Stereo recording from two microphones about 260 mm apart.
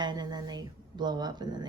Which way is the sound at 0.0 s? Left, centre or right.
Centre.